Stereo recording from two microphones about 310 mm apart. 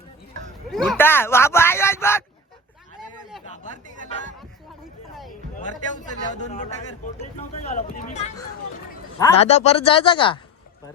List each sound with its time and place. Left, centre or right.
0.9 s speech: centre
5.9 s speech: left